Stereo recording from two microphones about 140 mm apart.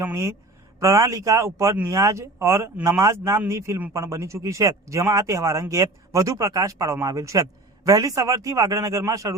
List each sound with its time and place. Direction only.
0.0 s speech: 20° right (ahead or behind)